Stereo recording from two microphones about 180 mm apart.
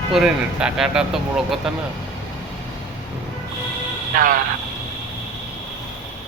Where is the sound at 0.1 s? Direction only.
5° right (ahead or behind).